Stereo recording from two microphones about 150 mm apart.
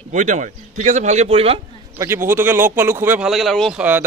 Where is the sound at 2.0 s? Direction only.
15° right (ahead or behind).